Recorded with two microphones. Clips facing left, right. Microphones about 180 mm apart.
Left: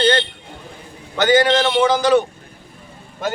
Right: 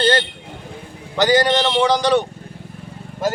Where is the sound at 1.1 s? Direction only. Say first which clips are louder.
Left 1 dB; centre (ahead or behind).